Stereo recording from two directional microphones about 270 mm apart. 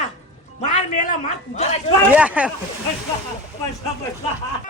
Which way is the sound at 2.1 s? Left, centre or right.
Centre.